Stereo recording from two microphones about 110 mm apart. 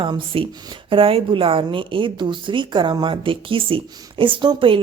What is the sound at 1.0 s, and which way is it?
Speech, 55° right (ahead or behind).